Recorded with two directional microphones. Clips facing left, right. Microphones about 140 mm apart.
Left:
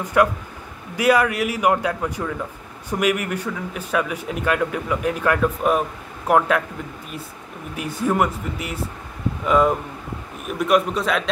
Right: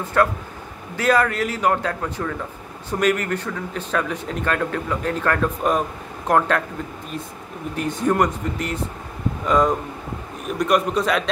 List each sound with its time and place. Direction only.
0.0 s speech: 15° left (ahead or behind)
7.7 s a man's voice: 10° left (ahead or behind)